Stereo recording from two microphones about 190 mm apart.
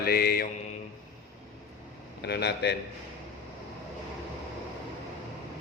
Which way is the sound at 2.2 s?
60° left (ahead or behind).